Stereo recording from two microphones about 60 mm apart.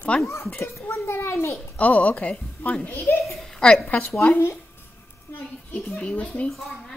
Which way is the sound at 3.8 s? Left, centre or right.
Left.